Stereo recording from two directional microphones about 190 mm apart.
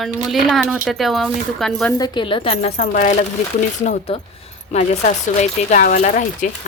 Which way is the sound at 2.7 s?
45° left (ahead or behind).